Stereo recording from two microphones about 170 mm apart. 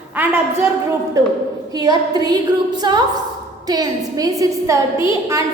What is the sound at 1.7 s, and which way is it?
A woman's voice, 25° right (ahead or behind).